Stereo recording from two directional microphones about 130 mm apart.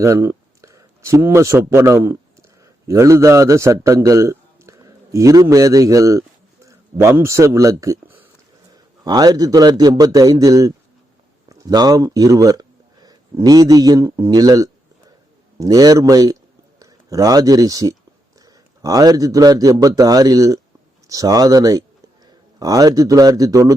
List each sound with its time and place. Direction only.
0.0 s speech: 20° right (ahead or behind)
9.0 s a man's voice: 30° right (ahead or behind)
11.4 s a sound: 25° right (ahead or behind)
13.3 s a man's voice: 30° right (ahead or behind)